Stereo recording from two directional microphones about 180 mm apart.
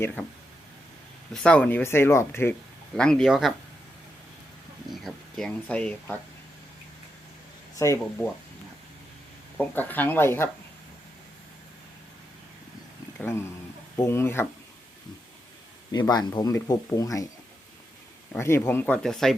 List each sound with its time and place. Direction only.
1.3 s speech: 5° left (ahead or behind)
4.9 s speech: centre (ahead or behind)
7.8 s speech: 15° left (ahead or behind)
9.6 s speech: 10° left (ahead or behind)
13.1 s speech: 15° left (ahead or behind)
15.9 s speech: 20° left (ahead or behind)
18.3 s speech: 15° left (ahead or behind)